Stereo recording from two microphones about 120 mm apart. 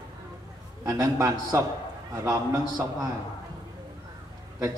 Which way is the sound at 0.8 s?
30° right (ahead or behind).